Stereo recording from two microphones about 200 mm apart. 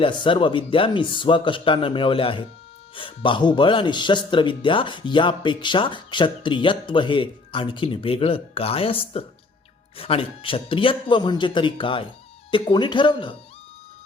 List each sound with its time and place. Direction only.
0.0 s speech: 25° left (ahead or behind)